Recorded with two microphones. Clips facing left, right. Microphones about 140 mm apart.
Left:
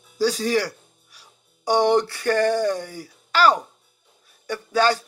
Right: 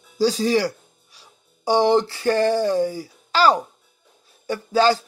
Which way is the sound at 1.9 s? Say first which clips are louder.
Right 1 dB; 25° right (ahead or behind).